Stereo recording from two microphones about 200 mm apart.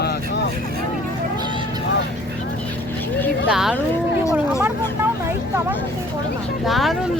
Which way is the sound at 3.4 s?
5° right (ahead or behind).